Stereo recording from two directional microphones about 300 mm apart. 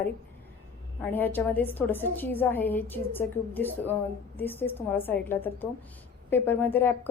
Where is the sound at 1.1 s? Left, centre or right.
Centre.